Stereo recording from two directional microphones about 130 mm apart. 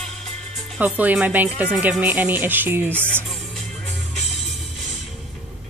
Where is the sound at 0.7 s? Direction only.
10° right (ahead or behind).